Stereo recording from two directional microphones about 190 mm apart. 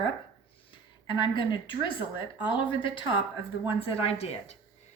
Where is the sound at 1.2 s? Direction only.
25° left (ahead or behind).